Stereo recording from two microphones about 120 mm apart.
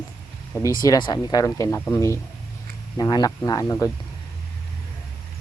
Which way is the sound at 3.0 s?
35° left (ahead or behind).